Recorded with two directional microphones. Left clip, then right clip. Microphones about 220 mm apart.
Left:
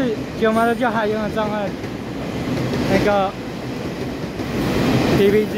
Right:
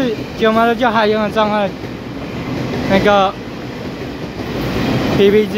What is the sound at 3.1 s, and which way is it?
Speech, 10° right (ahead or behind).